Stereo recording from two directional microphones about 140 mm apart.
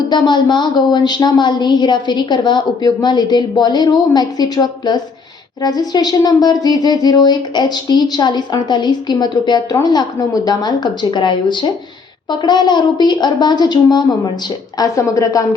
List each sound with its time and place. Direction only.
0.1 s a woman's voice: 30° left (ahead or behind)